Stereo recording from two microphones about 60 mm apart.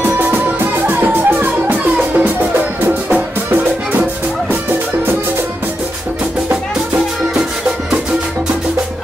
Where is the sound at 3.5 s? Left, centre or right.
Right.